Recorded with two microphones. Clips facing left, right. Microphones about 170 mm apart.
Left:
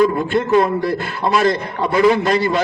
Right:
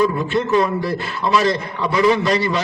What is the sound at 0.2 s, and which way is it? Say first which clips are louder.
A man's voice: left 2 dB; 50° left (ahead or behind).